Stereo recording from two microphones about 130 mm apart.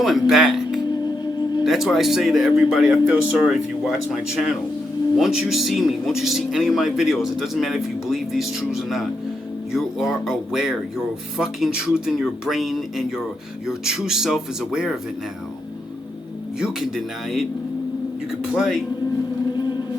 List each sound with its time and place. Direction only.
0.0 s speech: centre (ahead or behind)
0.9 s music: 30° left (ahead or behind)
1.6 s speech: centre (ahead or behind)
16.6 s speech: 5° right (ahead or behind)
19.5 s music: 35° left (ahead or behind)